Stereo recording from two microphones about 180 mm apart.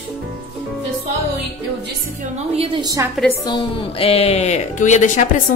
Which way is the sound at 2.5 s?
30° right (ahead or behind).